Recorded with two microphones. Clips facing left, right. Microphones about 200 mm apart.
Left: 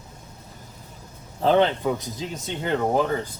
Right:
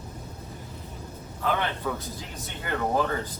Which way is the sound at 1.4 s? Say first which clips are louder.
Left 9 dB; 25° left (ahead or behind).